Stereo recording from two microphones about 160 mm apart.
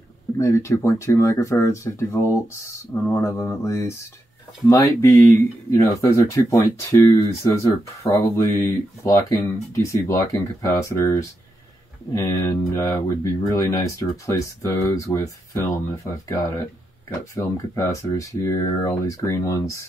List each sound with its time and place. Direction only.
0.4 s speech: 20° left (ahead or behind)